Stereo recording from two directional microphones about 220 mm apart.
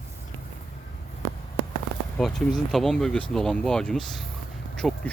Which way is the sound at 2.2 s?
Centre (ahead or behind).